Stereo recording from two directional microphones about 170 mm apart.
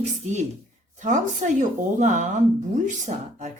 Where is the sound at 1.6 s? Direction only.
45° right (ahead or behind).